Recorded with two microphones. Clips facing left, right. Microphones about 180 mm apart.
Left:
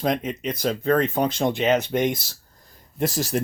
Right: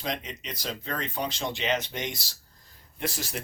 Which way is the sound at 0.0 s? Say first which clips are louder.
Left 10 dB; 50° left (ahead or behind).